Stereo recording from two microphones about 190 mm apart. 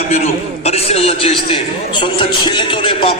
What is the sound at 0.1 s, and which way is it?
A man's voice, 35° left (ahead or behind).